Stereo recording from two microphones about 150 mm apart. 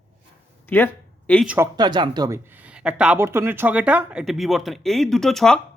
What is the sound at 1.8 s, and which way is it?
Speech, 30° right (ahead or behind).